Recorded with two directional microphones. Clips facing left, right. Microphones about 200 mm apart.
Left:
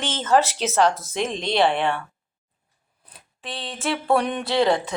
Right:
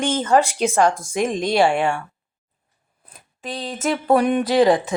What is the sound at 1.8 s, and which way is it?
Speech, 10° right (ahead or behind).